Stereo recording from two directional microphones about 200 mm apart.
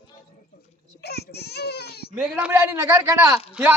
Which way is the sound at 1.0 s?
55° left (ahead or behind).